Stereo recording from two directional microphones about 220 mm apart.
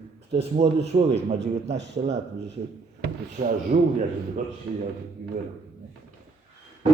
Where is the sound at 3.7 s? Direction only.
35° right (ahead or behind).